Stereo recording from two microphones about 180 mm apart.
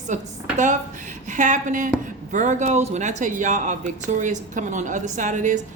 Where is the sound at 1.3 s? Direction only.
45° right (ahead or behind).